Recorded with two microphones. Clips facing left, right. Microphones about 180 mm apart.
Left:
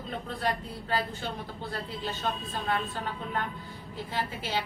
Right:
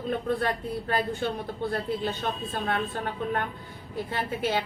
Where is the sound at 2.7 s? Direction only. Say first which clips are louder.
Right 1 dB; 60° right (ahead or behind).